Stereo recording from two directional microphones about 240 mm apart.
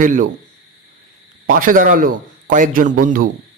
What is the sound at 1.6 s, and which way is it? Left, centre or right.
A woman's voice, right.